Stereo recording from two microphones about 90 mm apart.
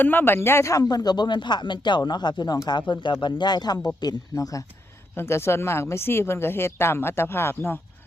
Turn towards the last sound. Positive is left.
turn(degrees=25)  # may be behind; listen again after turning